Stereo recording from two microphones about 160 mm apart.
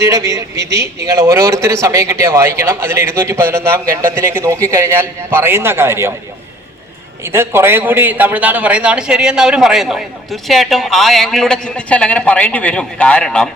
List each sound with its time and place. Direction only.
0.0 s a man's voice: 20° right (ahead or behind)
7.3 s a man's voice: 15° right (ahead or behind); by 13.5 s 5° left (ahead or behind)